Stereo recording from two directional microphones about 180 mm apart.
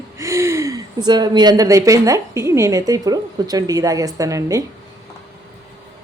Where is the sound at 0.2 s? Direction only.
15° right (ahead or behind).